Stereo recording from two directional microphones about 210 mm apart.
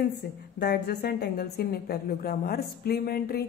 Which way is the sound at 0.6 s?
50° left (ahead or behind).